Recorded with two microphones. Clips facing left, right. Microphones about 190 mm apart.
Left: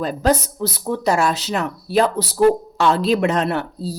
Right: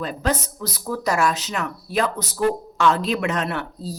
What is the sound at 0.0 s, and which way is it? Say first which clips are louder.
Speech: left 6 dB; 35° left (ahead or behind).